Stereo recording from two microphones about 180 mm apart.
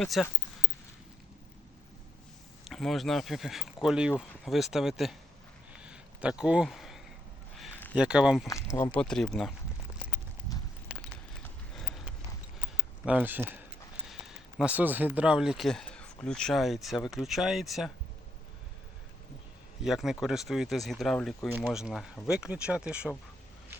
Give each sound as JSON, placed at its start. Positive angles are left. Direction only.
{"t": 0.0, "sound": "speech", "side_deg": 0}
{"t": 2.6, "sound": "speech", "side_deg": 0}
{"t": 5.8, "sound": "a sound", "side_deg": -5}
{"t": 7.9, "sound": "speech", "side_deg": -5}
{"t": 8.4, "sound": "speech", "side_deg": 15}
{"t": 9.0, "sound": "speech", "side_deg": 5}
{"t": 10.9, "sound": "a sound", "side_deg": -5}
{"t": 11.4, "sound": "clip-clop", "side_deg": 5}
{"t": 13.1, "sound": "speech", "side_deg": -10}
{"t": 19.8, "sound": "speech", "side_deg": 0}